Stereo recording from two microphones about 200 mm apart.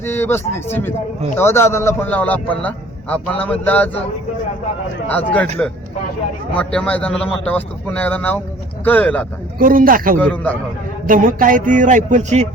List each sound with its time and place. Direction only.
0.0 s a man's voice: 10° left (ahead or behind)
5.0 s a man's voice: 10° left (ahead or behind)
6.6 s a man's voice: 5° left (ahead or behind)
9.6 s speech: 45° right (ahead or behind)
10.2 s a man's voice: 5° left (ahead or behind)
11.0 s speech: 45° right (ahead or behind)